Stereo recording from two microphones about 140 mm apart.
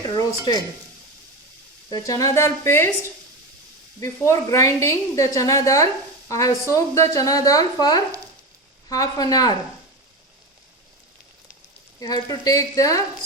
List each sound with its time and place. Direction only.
0.2 s speech: 25° left (ahead or behind)
1.9 s a woman's voice: 25° left (ahead or behind)
4.0 s a woman's voice: 20° left (ahead or behind)
11.9 s a woman's voice: 25° left (ahead or behind)